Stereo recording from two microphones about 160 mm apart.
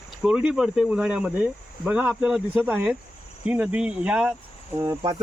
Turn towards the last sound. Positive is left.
turn(degrees=-25)  # may be behind; listen again after turning